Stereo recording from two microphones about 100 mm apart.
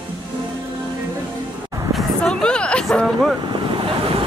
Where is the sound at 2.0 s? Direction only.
5° left (ahead or behind).